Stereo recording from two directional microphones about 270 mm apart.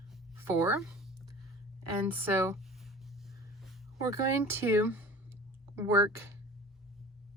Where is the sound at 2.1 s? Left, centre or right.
Centre.